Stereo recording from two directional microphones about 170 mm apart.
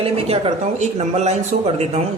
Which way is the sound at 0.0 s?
35° right (ahead or behind).